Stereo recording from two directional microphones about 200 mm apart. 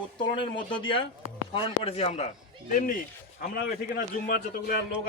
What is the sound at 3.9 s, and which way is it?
Speech, 45° left (ahead or behind).